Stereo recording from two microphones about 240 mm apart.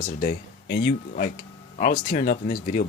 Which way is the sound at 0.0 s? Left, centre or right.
Left.